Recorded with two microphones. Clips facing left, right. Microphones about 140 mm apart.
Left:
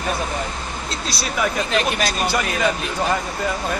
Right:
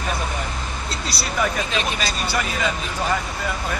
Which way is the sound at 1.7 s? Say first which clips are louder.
Left 4 dB; 60° left (ahead or behind).